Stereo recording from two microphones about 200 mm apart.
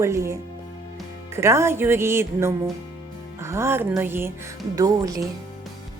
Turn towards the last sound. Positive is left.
turn(degrees=-15)  # may be behind; listen again after turning